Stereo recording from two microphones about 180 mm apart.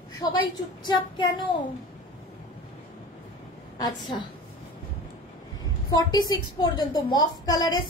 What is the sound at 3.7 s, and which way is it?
Speech, 20° left (ahead or behind).